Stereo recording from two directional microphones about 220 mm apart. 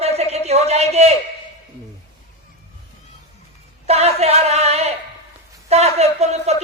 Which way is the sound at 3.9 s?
30° right (ahead or behind).